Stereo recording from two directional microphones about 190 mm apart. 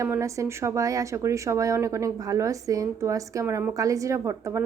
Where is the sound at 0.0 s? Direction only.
15° right (ahead or behind).